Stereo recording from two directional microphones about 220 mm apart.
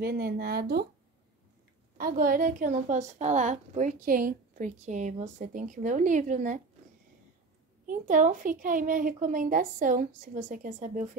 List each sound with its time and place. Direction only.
0.0 s speech: 45° right (ahead or behind)
2.0 s a woman's voice: 40° right (ahead or behind)
7.8 s a woman's voice: 35° right (ahead or behind)